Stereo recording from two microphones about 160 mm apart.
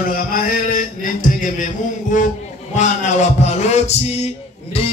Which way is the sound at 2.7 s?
50° left (ahead or behind).